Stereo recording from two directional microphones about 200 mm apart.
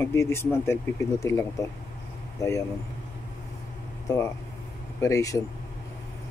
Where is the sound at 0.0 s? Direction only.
10° left (ahead or behind).